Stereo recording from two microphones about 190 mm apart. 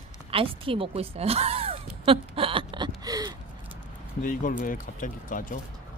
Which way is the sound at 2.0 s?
30° right (ahead or behind).